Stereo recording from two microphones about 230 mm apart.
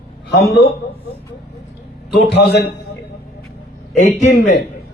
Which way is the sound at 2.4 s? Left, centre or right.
Left.